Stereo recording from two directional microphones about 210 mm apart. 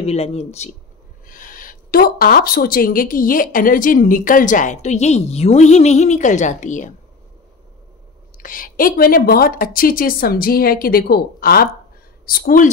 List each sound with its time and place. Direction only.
0.0 s speech: 30° left (ahead or behind)
1.2 s speech: 40° left (ahead or behind)
8.4 s a woman's voice: 40° left (ahead or behind)